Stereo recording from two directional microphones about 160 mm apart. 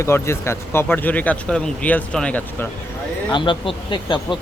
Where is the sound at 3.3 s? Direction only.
30° left (ahead or behind).